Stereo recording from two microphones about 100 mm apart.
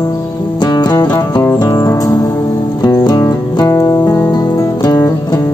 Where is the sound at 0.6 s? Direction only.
45° left (ahead or behind).